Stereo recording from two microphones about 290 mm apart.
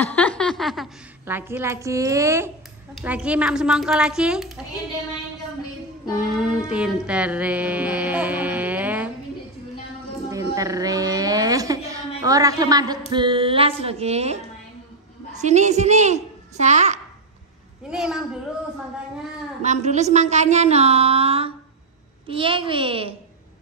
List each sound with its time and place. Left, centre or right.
0.0 s a woman's voice: centre
6.0 s a child's voice: centre
6.7 s music: centre
10.3 s a sound: centre
13.1 s speech: centre
15.4 s speech: right
17.8 s a child's voice: centre
19.6 s a child's voice: right